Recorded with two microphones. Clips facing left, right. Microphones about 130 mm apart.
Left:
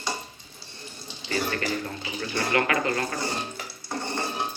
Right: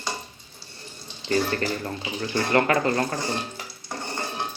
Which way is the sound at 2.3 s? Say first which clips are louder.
Right 4 dB; 35° right (ahead or behind).